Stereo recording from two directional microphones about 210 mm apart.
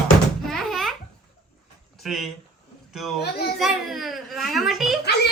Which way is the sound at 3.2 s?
50° left (ahead or behind).